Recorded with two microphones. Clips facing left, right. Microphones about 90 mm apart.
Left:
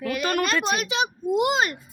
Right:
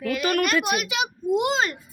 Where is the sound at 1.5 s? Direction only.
15° left (ahead or behind).